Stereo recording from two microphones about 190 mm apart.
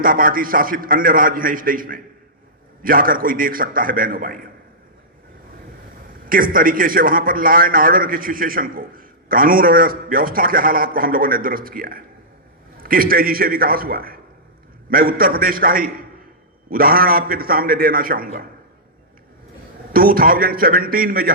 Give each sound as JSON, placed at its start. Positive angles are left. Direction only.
{"t": 0.0, "sound": "a man's voice", "side_deg": -50}
{"t": 6.2, "sound": "a man's voice", "side_deg": -50}
{"t": 19.9, "sound": "a man's voice", "side_deg": -50}